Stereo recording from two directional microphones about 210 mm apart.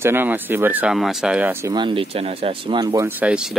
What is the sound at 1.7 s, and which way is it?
Speech, 25° right (ahead or behind).